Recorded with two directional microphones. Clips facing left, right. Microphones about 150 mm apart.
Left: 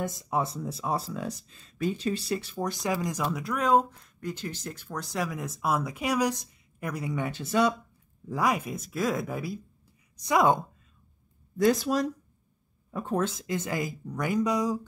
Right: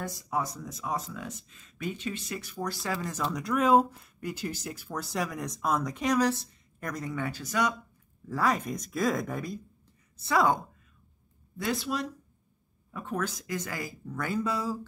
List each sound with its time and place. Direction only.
0.0 s speech: 20° left (ahead or behind)
3.4 s speech: centre (ahead or behind); by 7.7 s 25° left (ahead or behind)
8.3 s speech: 15° left (ahead or behind)
10.1 s a woman's voice: 15° left (ahead or behind)
11.5 s speech: 40° left (ahead or behind); by 14.9 s 15° left (ahead or behind)